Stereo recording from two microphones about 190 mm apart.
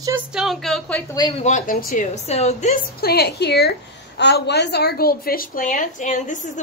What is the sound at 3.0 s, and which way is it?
A woman's voice, 55° left (ahead or behind).